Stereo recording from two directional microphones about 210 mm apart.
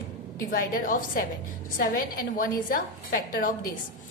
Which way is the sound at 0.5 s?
40° left (ahead or behind).